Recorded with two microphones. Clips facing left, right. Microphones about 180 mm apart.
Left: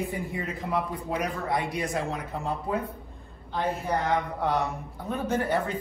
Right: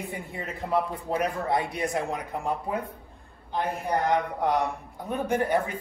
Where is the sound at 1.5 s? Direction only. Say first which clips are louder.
Right 1 dB; 20° right (ahead or behind).